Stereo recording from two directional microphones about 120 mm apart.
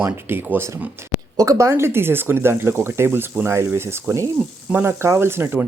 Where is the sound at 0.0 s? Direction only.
20° right (ahead or behind).